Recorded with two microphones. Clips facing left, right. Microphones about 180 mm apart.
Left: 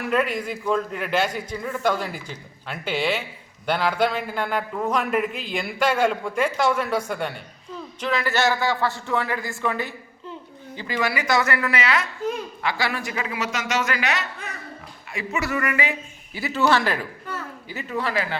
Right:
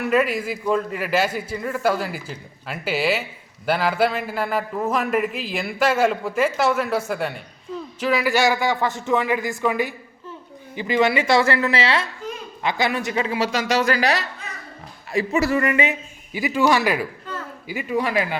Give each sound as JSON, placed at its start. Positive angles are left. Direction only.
{"t": 0.0, "sound": "a man's voice", "side_deg": -5}